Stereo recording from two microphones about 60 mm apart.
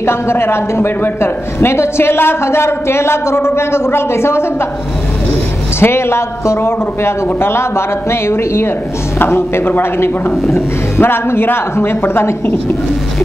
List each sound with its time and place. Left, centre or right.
0.0 s a man's voice: left
5.8 s a man's voice: left